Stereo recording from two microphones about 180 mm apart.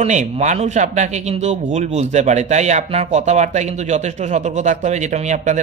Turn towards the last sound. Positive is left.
turn(degrees=-40)  # may be behind; listen again after turning